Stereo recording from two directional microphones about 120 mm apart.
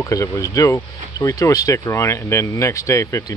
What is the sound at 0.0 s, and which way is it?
Speech, 25° left (ahead or behind).